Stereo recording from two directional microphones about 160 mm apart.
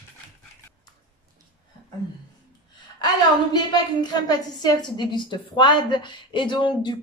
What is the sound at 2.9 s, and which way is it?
A woman's voice, 25° left (ahead or behind).